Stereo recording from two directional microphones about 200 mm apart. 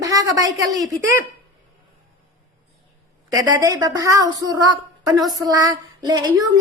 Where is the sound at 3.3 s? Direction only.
20° right (ahead or behind).